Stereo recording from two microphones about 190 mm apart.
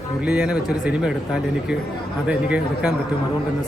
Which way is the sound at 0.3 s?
5° right (ahead or behind).